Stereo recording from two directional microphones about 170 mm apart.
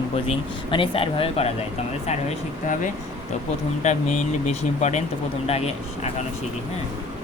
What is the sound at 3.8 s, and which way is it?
Speech, 45° left (ahead or behind).